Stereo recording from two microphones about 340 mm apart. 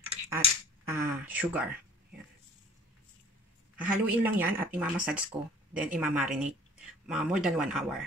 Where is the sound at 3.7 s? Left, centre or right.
Centre.